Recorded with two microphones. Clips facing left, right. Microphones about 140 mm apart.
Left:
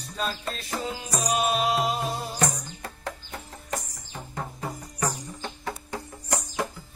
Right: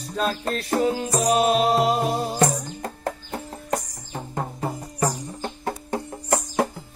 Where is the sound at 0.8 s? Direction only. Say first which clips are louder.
Right 11 dB; 55° right (ahead or behind).